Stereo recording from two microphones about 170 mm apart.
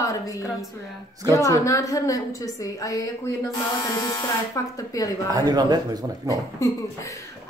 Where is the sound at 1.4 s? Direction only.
20° left (ahead or behind).